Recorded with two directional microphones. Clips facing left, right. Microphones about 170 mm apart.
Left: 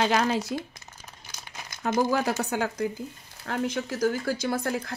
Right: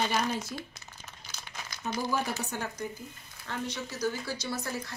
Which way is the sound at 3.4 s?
60° left (ahead or behind).